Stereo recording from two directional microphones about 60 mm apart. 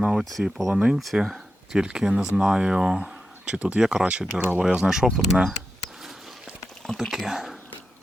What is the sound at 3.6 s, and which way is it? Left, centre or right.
Speech, right.